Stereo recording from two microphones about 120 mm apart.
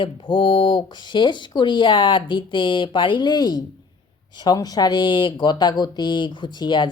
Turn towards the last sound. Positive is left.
turn(degrees=40)  # may be behind; listen again after turning